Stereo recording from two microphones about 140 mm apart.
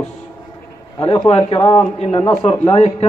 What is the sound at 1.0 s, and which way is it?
A man's voice, 40° left (ahead or behind).